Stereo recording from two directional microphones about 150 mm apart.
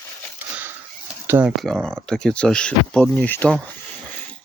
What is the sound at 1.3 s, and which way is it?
Speech, 15° right (ahead or behind).